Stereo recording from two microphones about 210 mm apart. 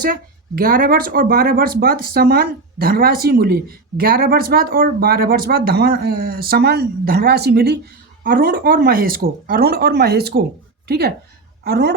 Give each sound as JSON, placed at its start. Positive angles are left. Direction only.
{"t": 0.5, "sound": "a woman's voice", "side_deg": -45}